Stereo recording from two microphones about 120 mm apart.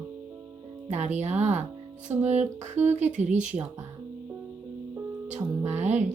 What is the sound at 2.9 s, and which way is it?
Speech, 75° right (ahead or behind).